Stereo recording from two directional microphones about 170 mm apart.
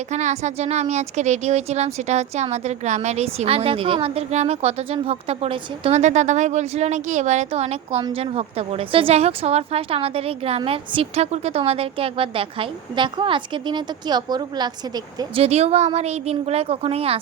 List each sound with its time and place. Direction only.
0.1 s a woman's voice: 45° right (ahead or behind)
6.0 s a woman's voice: 45° right (ahead or behind); by 15.4 s 25° right (ahead or behind)
15.4 s a woman's voice: 40° right (ahead or behind)